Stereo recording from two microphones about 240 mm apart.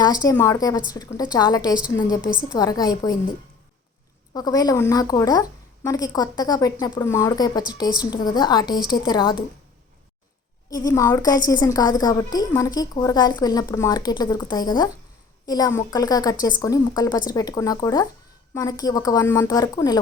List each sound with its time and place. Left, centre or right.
0.0 s a woman's voice: centre
2.2 s a woman's voice: centre
2.5 s a woman's voice: centre
4.4 s a woman's voice: centre
10.7 s a woman's voice: centre